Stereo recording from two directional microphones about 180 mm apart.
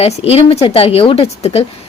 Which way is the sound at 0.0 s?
35° left (ahead or behind).